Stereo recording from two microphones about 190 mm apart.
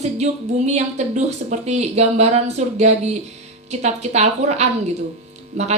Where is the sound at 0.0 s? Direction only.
35° right (ahead or behind).